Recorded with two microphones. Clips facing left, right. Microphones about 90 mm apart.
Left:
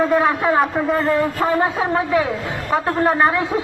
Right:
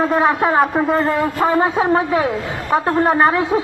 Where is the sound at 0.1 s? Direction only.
25° right (ahead or behind).